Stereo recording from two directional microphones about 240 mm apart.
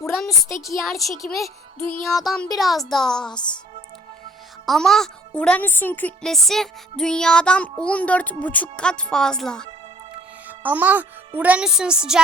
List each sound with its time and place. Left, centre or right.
0.3 s speech: centre
0.6 s speech: centre
3.3 s speech: centre
4.6 s a child's voice: centre